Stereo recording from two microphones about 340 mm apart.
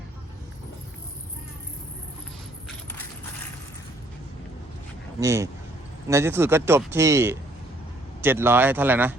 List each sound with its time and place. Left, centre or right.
5.2 s speech: centre